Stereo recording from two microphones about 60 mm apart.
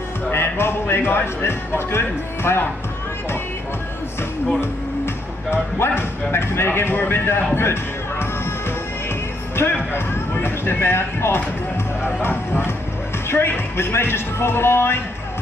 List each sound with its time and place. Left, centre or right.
0.3 s speech: left
5.8 s speech: left
7.5 s a sound: left
9.6 s speech: left